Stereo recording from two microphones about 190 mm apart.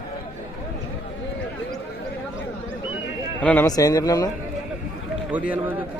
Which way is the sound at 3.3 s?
10° left (ahead or behind).